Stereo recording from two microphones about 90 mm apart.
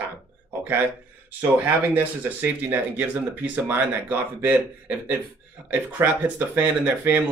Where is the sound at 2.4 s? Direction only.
20° right (ahead or behind).